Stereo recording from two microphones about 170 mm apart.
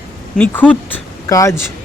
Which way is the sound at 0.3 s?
10° left (ahead or behind).